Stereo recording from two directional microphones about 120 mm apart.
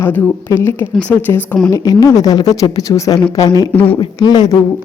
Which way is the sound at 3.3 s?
30° left (ahead or behind).